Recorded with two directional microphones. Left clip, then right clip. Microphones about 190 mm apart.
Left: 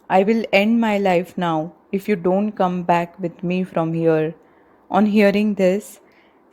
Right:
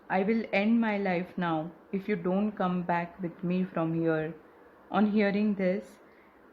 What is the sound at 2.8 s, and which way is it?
Speech, 45° left (ahead or behind).